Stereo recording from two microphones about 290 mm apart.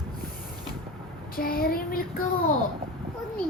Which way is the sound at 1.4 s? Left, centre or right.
Left.